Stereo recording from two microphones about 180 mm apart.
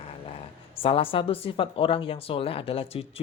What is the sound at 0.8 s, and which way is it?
Speech, 30° left (ahead or behind).